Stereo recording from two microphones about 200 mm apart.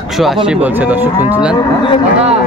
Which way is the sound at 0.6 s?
10° right (ahead or behind).